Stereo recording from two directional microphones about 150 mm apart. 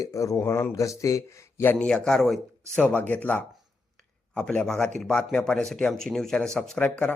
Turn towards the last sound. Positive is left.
turn(degrees=5)  # may be behind; listen again after turning